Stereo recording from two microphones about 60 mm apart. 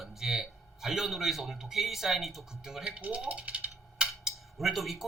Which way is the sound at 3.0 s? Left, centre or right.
Centre.